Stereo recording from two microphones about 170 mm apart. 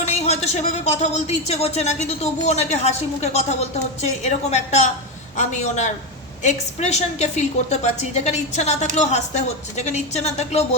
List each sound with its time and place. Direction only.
0.0 s a man's voice: 40° left (ahead or behind)